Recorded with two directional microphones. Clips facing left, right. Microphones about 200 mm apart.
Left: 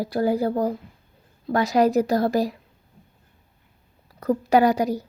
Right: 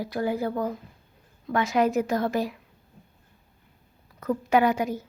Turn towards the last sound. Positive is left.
turn(degrees=35)  # may be behind; listen again after turning